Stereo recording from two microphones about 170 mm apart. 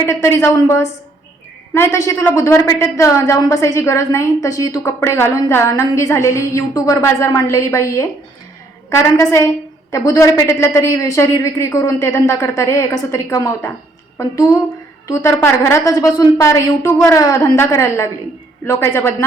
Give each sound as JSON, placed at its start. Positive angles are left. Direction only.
{"t": 0.0, "sound": "a woman's voice", "side_deg": 15}